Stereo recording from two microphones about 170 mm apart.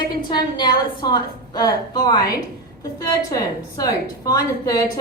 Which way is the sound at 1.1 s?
25° left (ahead or behind).